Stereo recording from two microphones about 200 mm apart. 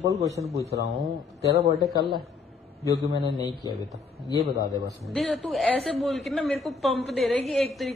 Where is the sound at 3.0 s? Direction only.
25° right (ahead or behind).